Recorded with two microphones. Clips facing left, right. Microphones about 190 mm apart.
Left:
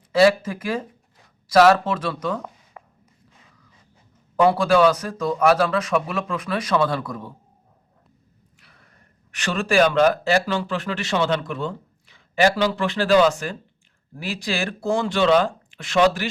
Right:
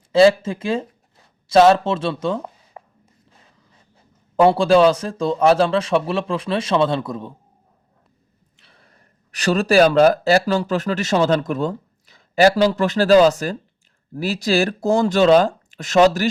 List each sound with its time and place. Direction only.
0.1 s a man's voice: 25° right (ahead or behind)
4.4 s a man's voice: 30° right (ahead or behind)
8.5 s speech: 30° right (ahead or behind)